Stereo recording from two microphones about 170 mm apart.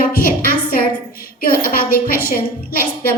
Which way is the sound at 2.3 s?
60° left (ahead or behind).